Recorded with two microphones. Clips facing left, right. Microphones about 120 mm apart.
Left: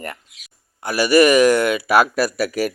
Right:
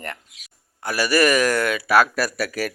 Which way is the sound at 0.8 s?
20° left (ahead or behind).